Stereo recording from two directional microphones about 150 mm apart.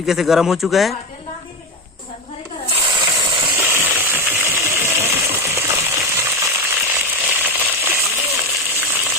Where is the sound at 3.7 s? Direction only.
15° right (ahead or behind).